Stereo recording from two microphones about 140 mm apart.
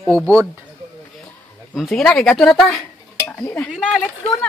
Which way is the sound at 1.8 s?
Centre (ahead or behind).